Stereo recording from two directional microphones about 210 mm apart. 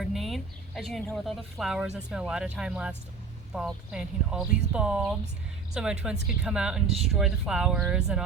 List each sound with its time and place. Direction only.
0.0 s speech: centre (ahead or behind)